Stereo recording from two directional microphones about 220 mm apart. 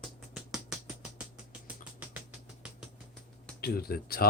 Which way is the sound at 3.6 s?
45° left (ahead or behind).